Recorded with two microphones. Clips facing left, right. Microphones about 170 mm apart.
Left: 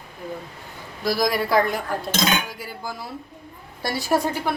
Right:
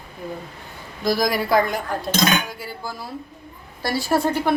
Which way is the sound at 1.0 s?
Centre (ahead or behind).